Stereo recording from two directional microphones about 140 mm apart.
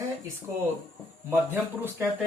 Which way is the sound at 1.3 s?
15° right (ahead or behind).